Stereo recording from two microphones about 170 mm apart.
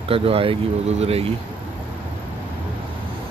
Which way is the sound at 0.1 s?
35° right (ahead or behind).